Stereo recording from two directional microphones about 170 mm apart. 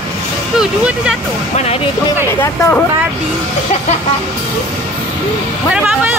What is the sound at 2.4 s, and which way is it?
Speech, 15° left (ahead or behind).